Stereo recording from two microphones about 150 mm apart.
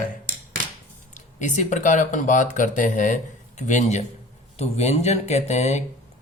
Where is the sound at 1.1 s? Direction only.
55° left (ahead or behind).